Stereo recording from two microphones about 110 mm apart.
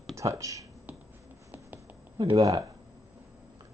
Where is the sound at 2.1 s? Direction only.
45° right (ahead or behind).